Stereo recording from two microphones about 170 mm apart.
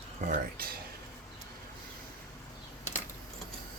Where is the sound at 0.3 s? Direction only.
55° right (ahead or behind).